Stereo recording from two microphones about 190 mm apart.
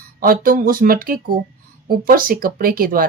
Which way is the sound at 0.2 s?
50° right (ahead or behind).